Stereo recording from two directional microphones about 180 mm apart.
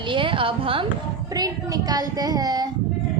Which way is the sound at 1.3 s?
20° right (ahead or behind).